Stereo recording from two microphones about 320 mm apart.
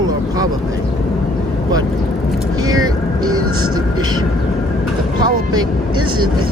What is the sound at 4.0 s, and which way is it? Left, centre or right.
Speech, centre.